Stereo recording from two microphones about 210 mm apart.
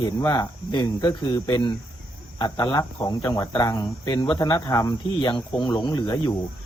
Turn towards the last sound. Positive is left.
turn(degrees=20)  # may be behind; listen again after turning